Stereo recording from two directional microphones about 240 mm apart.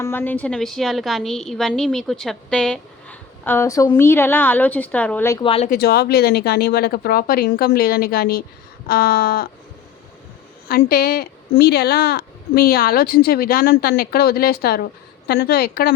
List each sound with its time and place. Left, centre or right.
0.0 s a woman's voice: centre
5.4 s speech: left
5.6 s a woman's voice: left
10.7 s a woman's voice: left